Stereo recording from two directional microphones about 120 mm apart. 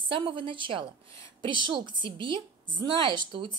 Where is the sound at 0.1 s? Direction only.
45° right (ahead or behind).